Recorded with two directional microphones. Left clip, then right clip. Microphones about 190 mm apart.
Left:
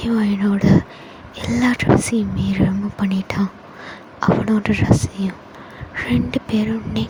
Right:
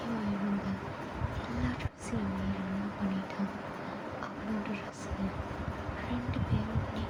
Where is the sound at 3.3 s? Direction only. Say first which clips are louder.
Left 12 dB; 60° left (ahead or behind).